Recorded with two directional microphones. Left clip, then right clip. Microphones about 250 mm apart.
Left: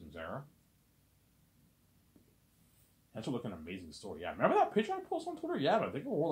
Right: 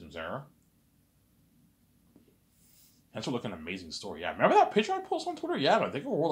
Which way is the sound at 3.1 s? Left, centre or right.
Right.